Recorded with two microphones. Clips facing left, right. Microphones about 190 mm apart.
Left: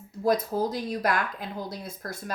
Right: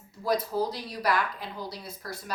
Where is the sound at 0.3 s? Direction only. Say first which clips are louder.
Left 3 dB; 50° left (ahead or behind).